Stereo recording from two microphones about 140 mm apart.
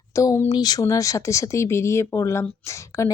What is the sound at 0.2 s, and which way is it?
Speech, 25° left (ahead or behind).